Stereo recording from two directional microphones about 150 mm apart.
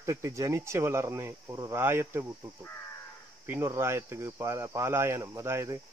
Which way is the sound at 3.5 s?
15° right (ahead or behind).